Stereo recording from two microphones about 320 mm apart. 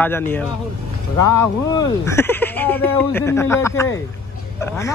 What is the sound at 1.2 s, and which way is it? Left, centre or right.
Speech, centre.